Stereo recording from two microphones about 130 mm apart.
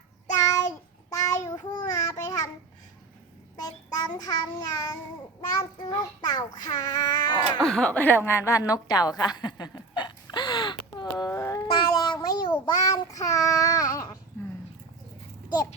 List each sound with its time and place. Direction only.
0.3 s child singing: 25° left (ahead or behind)
3.6 s child singing: 30° left (ahead or behind)
5.9 s a child's voice: 30° left (ahead or behind)
6.8 s cat: 30° left (ahead or behind)
7.6 s a sound: 5° left (ahead or behind); by 12.7 s 35° left (ahead or behind)
12.7 s child singing: 25° left (ahead or behind)